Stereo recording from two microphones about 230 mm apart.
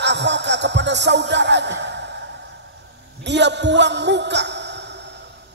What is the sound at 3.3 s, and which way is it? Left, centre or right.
Music, right.